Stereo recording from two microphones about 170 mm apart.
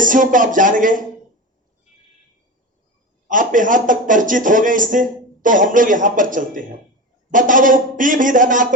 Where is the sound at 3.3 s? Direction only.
50° right (ahead or behind).